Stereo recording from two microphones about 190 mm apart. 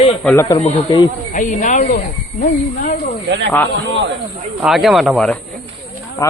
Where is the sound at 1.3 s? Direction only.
40° left (ahead or behind).